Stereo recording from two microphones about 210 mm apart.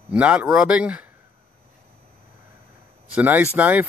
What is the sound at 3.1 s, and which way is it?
Speech, 10° right (ahead or behind).